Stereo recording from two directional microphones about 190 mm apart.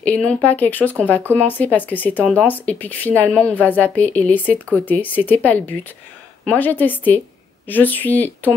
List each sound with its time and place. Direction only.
0.0 s speech: 5° left (ahead or behind)